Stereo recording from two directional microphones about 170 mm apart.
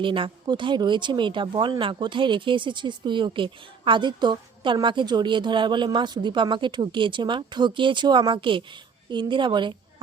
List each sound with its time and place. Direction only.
0.0 s speech: 30° right (ahead or behind)